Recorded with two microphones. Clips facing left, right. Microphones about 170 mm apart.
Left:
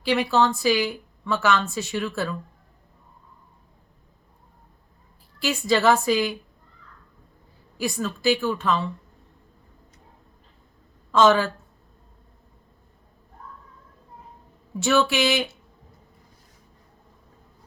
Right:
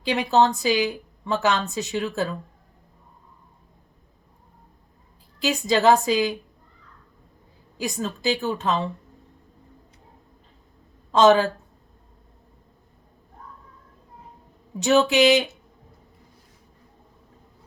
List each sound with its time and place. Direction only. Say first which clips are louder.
0.0 s a woman's voice: right 1 dB; 20° right (ahead or behind)
5.4 s a woman's voice: right 1 dB; 20° right (ahead or behind)
7.8 s a woman's voice: left 1 dB; 20° right (ahead or behind)
11.1 s a woman's voice: right 2 dB; 20° right (ahead or behind)
14.8 s a woman's voice: right 3 dB; 20° right (ahead or behind)